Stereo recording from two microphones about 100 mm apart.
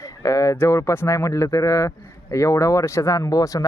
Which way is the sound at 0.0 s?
35° left (ahead or behind).